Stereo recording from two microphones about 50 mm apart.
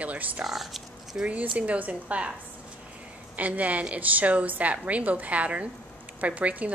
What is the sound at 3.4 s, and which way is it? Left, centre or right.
A woman's voice, right.